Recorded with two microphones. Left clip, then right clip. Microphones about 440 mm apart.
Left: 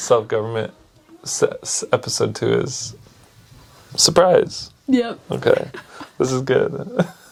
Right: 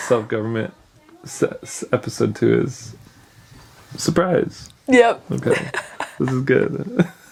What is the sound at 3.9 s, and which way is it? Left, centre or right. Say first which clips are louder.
Speech: left 6 dB; left.